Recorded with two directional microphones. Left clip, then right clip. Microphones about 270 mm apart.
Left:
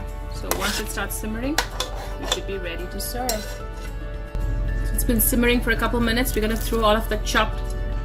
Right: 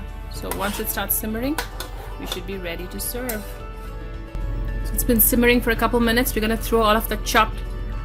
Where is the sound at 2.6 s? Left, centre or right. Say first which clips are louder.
Even; right.